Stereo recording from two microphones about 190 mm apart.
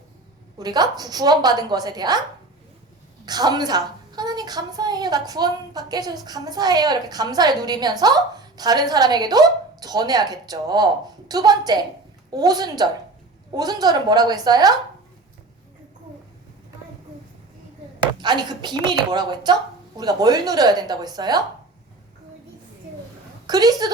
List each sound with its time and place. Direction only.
0.6 s a woman's voice: 20° right (ahead or behind)
3.2 s a woman's voice: 20° right (ahead or behind)
18.0 s a woman's voice: 25° right (ahead or behind)
23.5 s a woman's voice: 20° right (ahead or behind)